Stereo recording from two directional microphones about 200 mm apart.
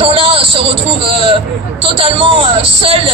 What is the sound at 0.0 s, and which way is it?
Vehicle, 25° right (ahead or behind).